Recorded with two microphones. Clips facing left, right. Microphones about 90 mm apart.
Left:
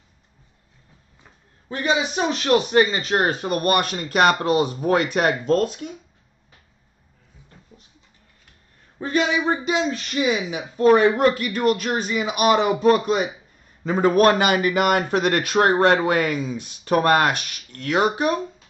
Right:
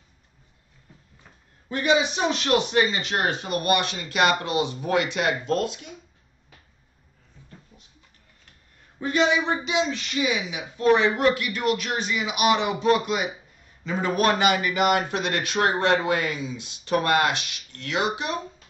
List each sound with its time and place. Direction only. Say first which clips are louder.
1.7 s a man's voice: right 1 dB; 25° left (ahead or behind); by 5.9 s 45° left (ahead or behind)
9.0 s a man's voice: left 1 dB; 40° left (ahead or behind)